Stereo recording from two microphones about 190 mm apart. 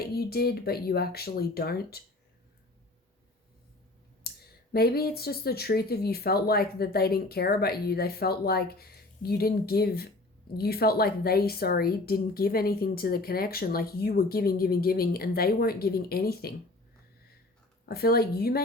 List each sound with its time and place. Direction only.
0.0 s speech: 55° left (ahead or behind)
4.2 s clicking: 55° left (ahead or behind)
4.7 s speech: 55° left (ahead or behind)
17.8 s speech: 55° left (ahead or behind)